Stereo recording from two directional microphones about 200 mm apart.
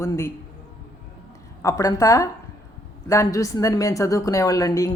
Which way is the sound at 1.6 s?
15° left (ahead or behind).